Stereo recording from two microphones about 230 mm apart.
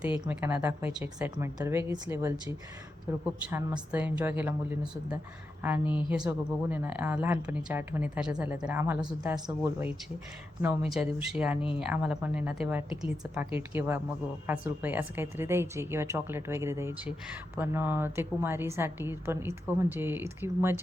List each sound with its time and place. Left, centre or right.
0.3 s a woman's voice: centre